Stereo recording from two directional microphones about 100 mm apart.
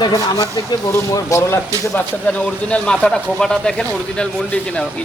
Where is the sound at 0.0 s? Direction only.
35° left (ahead or behind).